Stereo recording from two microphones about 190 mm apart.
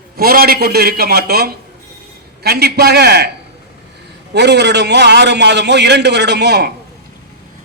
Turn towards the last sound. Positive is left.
turn(degrees=-60)  # may be behind; listen again after turning